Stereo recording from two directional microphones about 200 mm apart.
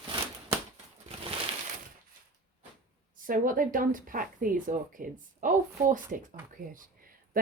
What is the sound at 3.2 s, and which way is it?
Speech, 45° right (ahead or behind).